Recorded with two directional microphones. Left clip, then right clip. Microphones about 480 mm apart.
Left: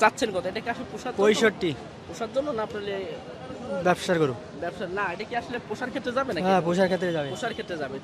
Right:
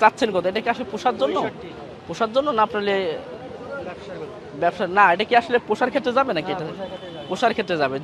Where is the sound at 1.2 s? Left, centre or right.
Left.